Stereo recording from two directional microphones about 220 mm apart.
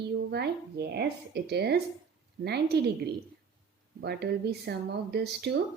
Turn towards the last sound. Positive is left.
turn(degrees=-45)  # may be behind; listen again after turning